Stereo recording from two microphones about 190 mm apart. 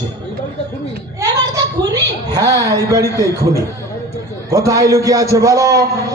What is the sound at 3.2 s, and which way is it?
Speech, 15° right (ahead or behind).